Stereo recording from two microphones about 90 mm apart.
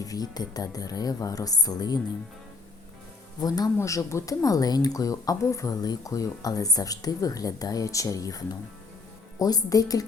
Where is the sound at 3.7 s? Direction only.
35° left (ahead or behind).